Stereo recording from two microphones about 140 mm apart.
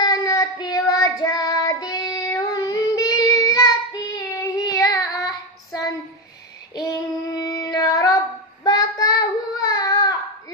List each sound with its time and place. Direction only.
0.0 s child singing: 25° left (ahead or behind)
6.7 s child singing: 30° left (ahead or behind)